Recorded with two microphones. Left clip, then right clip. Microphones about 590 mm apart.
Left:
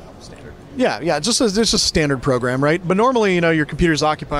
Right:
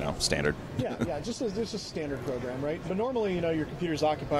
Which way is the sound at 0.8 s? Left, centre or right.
Left.